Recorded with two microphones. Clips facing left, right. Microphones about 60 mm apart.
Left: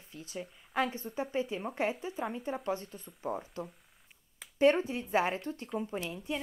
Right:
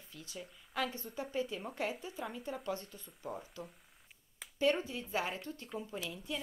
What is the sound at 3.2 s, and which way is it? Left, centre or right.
Speech, left.